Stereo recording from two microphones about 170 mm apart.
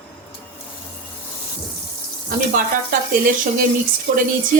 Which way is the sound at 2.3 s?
55° right (ahead or behind).